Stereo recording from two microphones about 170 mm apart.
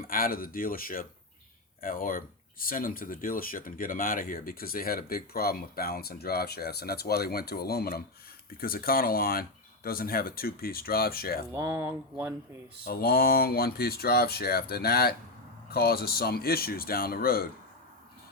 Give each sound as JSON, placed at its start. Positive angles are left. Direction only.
{"t": 0.1, "sound": "speech", "side_deg": 60}
{"t": 11.5, "sound": "speech", "side_deg": -15}
{"t": 12.8, "sound": "speech", "side_deg": 60}